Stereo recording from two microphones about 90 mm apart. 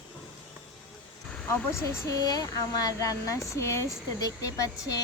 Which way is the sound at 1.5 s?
30° left (ahead or behind).